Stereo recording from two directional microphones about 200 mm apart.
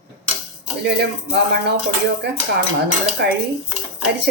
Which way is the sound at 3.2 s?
55° right (ahead or behind).